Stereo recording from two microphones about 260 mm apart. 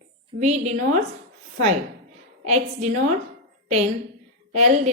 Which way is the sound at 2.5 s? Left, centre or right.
Right.